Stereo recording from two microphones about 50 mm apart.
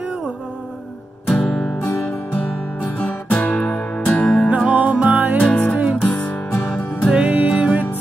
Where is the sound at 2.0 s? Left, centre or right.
Left.